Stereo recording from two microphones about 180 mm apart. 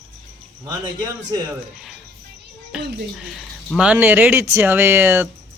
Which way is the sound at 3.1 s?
Centre (ahead or behind).